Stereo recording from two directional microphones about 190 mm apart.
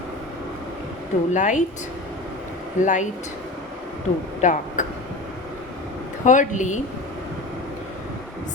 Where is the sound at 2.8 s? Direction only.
40° left (ahead or behind).